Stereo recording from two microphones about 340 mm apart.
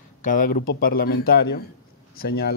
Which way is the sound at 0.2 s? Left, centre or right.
Left.